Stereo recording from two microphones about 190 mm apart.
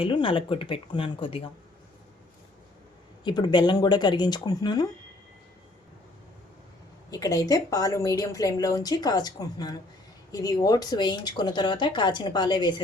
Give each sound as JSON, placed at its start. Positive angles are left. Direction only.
{"t": 0.0, "sound": "a woman's voice", "side_deg": 25}
{"t": 3.2, "sound": "a woman's voice", "side_deg": 25}
{"t": 7.1, "sound": "a woman's voice", "side_deg": 20}